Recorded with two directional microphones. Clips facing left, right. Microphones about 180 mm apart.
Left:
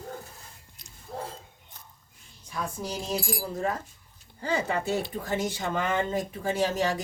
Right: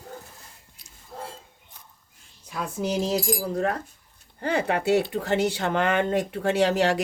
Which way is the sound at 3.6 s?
65° right (ahead or behind).